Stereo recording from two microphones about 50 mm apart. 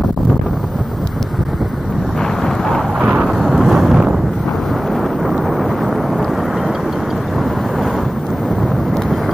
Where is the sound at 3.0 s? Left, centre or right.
Right.